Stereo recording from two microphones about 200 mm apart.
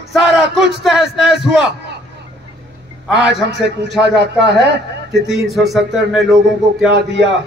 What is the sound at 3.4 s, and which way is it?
Speech, 60° right (ahead or behind).